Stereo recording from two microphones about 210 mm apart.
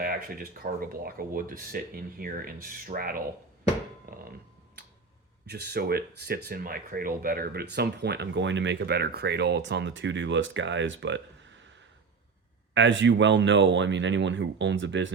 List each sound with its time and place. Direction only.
0.0 s speech: 45° right (ahead or behind)
4.1 s a sound: 40° right (ahead or behind)
5.5 s speech: 50° right (ahead or behind)
12.7 s speech: 60° right (ahead or behind)